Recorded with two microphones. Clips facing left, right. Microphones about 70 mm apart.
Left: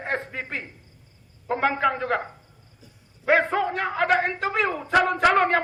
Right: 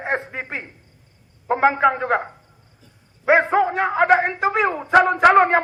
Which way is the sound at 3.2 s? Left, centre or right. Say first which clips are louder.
Right 5 dB; centre.